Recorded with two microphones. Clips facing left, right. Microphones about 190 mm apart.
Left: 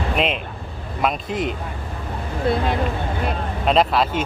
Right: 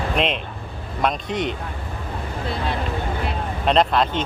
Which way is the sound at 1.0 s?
Centre (ahead or behind).